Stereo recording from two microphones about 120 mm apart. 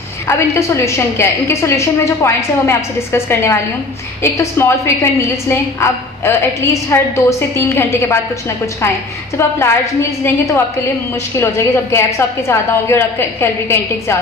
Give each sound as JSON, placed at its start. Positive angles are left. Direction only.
{"t": 0.3, "sound": "a woman's voice", "side_deg": 25}
{"t": 9.4, "sound": "a woman's voice", "side_deg": 20}
{"t": 11.3, "sound": "a woman's voice", "side_deg": 20}